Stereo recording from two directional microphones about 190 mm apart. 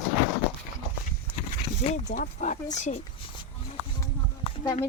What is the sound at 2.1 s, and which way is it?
Speech, 45° left (ahead or behind).